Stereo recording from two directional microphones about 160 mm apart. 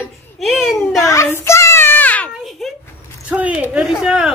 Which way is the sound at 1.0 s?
20° left (ahead or behind).